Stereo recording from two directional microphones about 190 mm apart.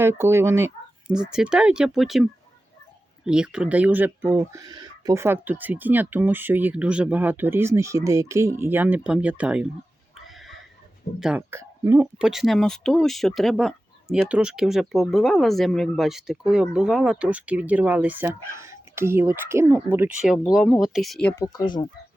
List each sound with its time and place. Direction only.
0.0 s speech: 15° right (ahead or behind)
3.2 s speech: 5° right (ahead or behind)
10.2 s a sound: centre (ahead or behind)
11.2 s speech: 5° right (ahead or behind)
21.4 s speech: 25° left (ahead or behind)